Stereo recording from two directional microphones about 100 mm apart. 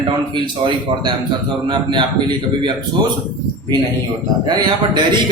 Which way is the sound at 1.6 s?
50° right (ahead or behind).